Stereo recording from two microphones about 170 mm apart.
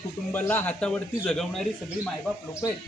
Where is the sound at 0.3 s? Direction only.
10° left (ahead or behind).